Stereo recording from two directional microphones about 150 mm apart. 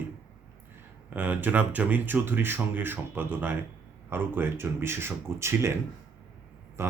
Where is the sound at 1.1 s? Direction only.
10° right (ahead or behind).